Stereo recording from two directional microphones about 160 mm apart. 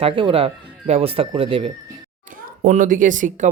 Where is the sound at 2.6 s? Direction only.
55° right (ahead or behind).